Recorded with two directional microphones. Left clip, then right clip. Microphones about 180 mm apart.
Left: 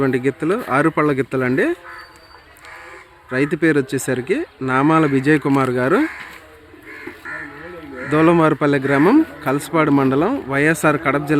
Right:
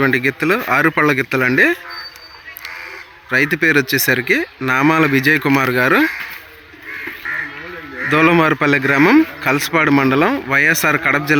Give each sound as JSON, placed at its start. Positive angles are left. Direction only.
{"t": 0.0, "sound": "a man's voice", "side_deg": 5}
{"t": 3.3, "sound": "a man's voice", "side_deg": 0}
{"t": 8.1, "sound": "a man's voice", "side_deg": 0}